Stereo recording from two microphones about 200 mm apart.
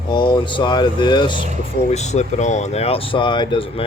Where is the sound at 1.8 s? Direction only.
35° left (ahead or behind).